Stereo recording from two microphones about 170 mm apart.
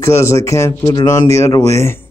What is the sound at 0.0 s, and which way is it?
Speech, 15° left (ahead or behind).